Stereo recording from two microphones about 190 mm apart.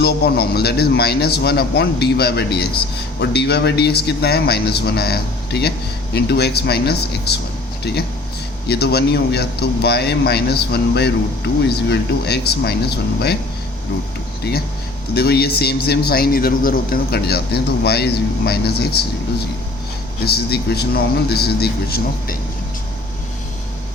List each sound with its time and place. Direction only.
0.0 s a man's voice: 60° left (ahead or behind)
15.1 s a man's voice: 55° left (ahead or behind)
20.2 s a man's voice: 55° left (ahead or behind)